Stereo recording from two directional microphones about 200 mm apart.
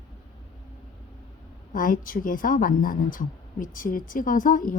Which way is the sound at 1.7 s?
45° left (ahead or behind).